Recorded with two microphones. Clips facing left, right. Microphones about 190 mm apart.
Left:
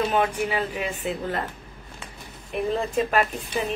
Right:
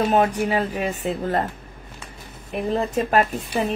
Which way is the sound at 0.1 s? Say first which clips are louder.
Right 4 dB; 35° right (ahead or behind).